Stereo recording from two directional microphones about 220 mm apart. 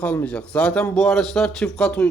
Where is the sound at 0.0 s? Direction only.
5° left (ahead or behind).